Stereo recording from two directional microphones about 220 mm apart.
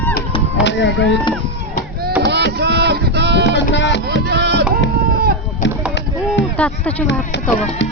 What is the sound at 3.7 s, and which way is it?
Music, 55° left (ahead or behind).